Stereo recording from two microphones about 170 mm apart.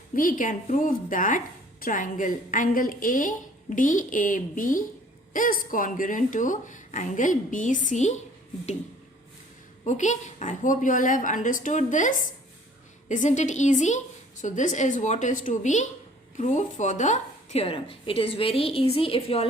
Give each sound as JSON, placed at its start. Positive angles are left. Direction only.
{"t": 0.1, "sound": "a woman's voice", "side_deg": 55}
{"t": 9.8, "sound": "a woman's voice", "side_deg": 45}